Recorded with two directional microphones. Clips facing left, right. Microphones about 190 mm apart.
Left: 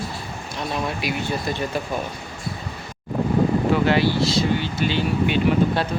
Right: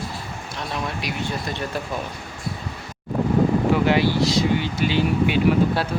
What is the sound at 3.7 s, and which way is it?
Speech, 15° right (ahead or behind).